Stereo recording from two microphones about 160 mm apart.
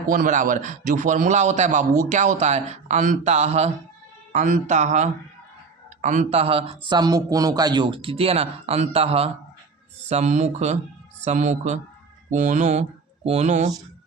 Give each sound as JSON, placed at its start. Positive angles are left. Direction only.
{"t": 0.1, "sound": "a man's voice", "side_deg": -55}
{"t": 6.4, "sound": "a man's voice", "side_deg": -35}